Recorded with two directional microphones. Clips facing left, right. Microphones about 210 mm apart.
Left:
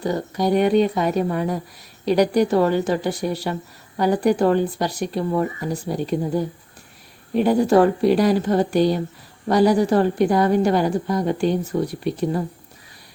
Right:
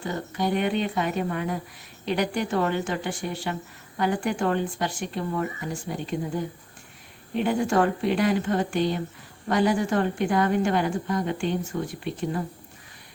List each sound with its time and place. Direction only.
0.0 s a woman's voice: 40° left (ahead or behind)